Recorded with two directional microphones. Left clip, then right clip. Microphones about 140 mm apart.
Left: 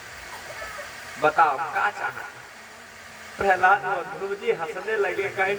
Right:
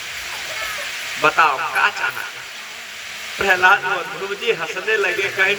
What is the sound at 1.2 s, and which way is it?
Speech, 25° left (ahead or behind).